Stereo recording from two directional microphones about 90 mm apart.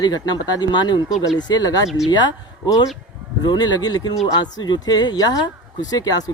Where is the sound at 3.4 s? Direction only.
50° left (ahead or behind).